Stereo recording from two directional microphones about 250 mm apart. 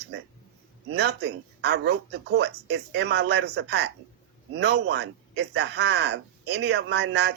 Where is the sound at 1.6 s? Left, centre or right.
Right.